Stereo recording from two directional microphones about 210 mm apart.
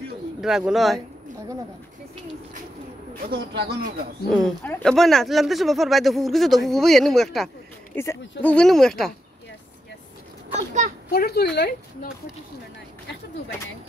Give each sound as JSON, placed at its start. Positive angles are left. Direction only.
{"t": 0.4, "sound": "speech", "side_deg": 0}
{"t": 3.3, "sound": "a man's voice", "side_deg": -50}
{"t": 4.3, "sound": "speech", "side_deg": 5}
{"t": 10.5, "sound": "a child's voice", "side_deg": -35}
{"t": 11.1, "sound": "a woman's voice", "side_deg": 50}